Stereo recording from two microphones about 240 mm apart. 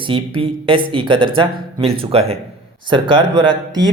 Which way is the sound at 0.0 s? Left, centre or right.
Right.